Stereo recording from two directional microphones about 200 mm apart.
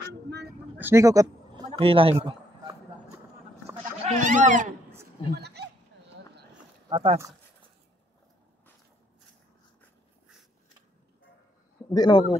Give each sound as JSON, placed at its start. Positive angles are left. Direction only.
{"t": 0.7, "sound": "speech", "side_deg": -10}
{"t": 1.8, "sound": "speech", "side_deg": -30}
{"t": 4.0, "sound": "a sound", "side_deg": -35}
{"t": 5.4, "sound": "a sound", "side_deg": -55}
{"t": 6.9, "sound": "speech", "side_deg": -25}
{"t": 11.9, "sound": "a man's voice", "side_deg": 20}